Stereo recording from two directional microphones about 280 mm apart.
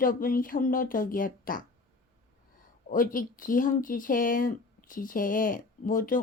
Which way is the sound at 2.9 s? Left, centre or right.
Left.